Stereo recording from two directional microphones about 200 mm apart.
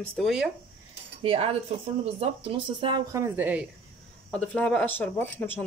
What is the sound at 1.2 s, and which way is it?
A woman's voice, 30° right (ahead or behind).